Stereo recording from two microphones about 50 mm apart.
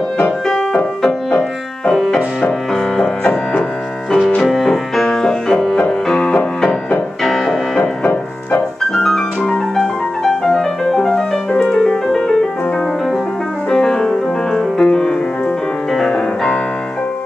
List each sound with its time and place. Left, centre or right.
4.4 s music: centre
8.1 s music: left
8.9 s piano: centre
9.5 s music: centre
13.7 s music: centre
15.9 s music: centre